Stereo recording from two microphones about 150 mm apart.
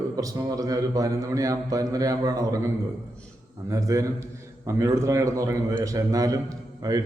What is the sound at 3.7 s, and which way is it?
A man's voice, 20° right (ahead or behind).